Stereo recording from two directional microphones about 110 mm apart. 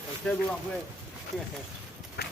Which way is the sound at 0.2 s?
10° left (ahead or behind).